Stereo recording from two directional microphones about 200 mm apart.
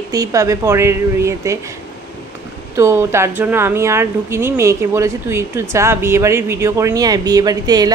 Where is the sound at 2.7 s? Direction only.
15° right (ahead or behind).